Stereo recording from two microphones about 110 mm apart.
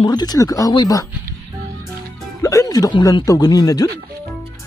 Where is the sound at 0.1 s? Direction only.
40° left (ahead or behind).